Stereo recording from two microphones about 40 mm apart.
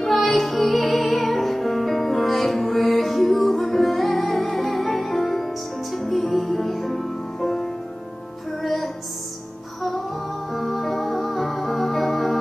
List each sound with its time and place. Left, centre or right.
0.0 s music: centre
10.5 s music: centre